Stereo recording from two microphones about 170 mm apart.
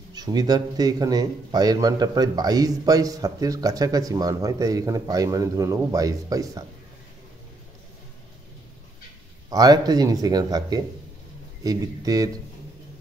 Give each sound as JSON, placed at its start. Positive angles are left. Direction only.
{"t": 0.1, "sound": "speech", "side_deg": -25}
{"t": 9.5, "sound": "speech", "side_deg": -20}